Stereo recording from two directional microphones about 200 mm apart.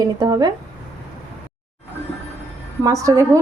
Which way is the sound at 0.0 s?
20° right (ahead or behind).